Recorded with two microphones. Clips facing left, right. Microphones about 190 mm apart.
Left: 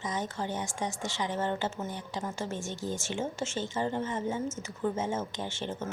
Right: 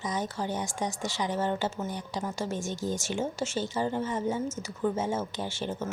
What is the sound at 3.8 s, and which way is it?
Speech, 5° right (ahead or behind).